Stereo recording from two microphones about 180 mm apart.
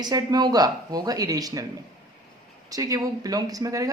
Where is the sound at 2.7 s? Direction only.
20° right (ahead or behind).